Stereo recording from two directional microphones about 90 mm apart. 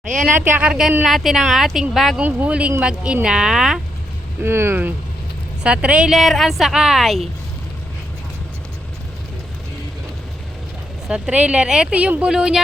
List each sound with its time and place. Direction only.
0.3 s speech: 25° right (ahead or behind)
0.6 s speech: 10° right (ahead or behind)
2.2 s speech: 15° right (ahead or behind)
4.4 s speech: 25° right (ahead or behind)
5.6 s speech: 10° right (ahead or behind)
6.1 s speech: centre (ahead or behind)
11.1 s speech: 15° right (ahead or behind)